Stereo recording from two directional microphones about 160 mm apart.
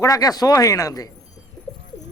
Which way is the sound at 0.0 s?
25° left (ahead or behind).